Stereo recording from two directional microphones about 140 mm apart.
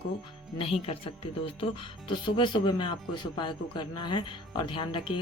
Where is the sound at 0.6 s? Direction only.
40° left (ahead or behind).